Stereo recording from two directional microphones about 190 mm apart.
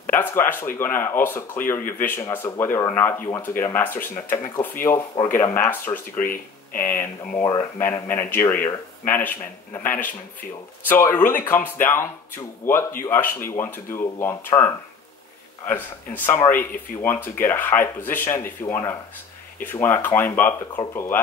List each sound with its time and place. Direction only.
0.0 s speech: 10° left (ahead or behind)
6.1 s speech: 45° left (ahead or behind)
6.9 s speech: 15° left (ahead or behind)
12.6 s speech: 10° left (ahead or behind)